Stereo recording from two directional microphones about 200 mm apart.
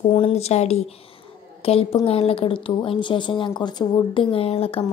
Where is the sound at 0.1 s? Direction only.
30° left (ahead or behind).